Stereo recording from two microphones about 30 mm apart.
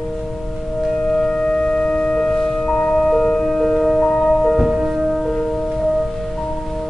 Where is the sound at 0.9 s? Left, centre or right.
Centre.